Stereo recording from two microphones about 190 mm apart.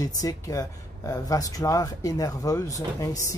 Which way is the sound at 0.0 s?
20° left (ahead or behind).